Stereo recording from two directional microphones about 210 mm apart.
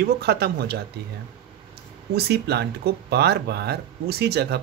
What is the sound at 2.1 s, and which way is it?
Speech, 50° right (ahead or behind).